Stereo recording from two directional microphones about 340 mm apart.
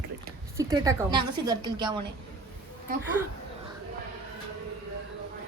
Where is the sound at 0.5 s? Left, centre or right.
Centre.